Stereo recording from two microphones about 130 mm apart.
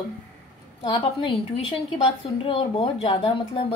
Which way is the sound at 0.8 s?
40° left (ahead or behind).